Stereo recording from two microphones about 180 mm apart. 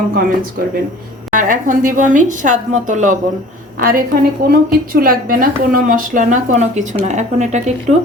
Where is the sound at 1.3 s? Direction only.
50° right (ahead or behind).